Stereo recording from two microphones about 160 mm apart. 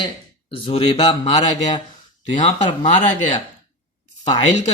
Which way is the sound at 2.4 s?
50° left (ahead or behind).